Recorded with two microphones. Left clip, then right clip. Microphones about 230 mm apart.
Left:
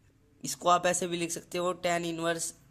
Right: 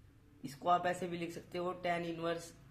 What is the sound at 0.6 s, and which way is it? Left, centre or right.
Speech, left.